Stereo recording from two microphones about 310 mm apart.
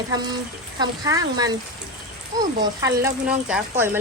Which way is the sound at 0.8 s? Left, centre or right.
Centre.